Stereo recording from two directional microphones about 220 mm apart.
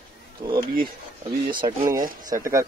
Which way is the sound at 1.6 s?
20° right (ahead or behind).